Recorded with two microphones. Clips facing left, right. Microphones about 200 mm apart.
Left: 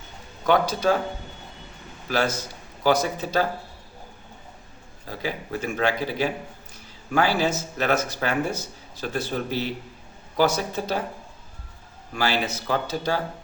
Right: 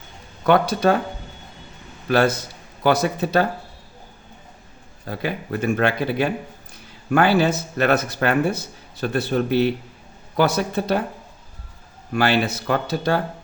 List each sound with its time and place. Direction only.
0.4 s speech: 60° right (ahead or behind)
2.0 s speech: 60° right (ahead or behind)
5.0 s speech: 60° right (ahead or behind)
12.1 s speech: 60° right (ahead or behind)